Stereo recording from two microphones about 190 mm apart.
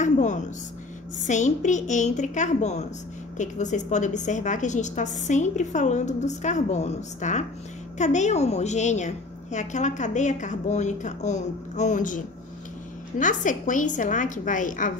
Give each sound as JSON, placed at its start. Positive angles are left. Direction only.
{"t": 0.0, "sound": "a woman's voice", "side_deg": 40}
{"t": 13.2, "sound": "a woman's voice", "side_deg": 40}